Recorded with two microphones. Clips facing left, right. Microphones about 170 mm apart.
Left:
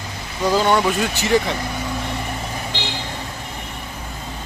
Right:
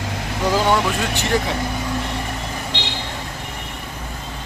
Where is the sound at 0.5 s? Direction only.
Centre (ahead or behind).